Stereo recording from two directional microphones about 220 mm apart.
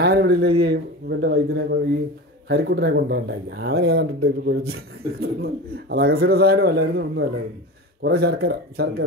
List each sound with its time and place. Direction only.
0.0 s speech: 45° right (ahead or behind)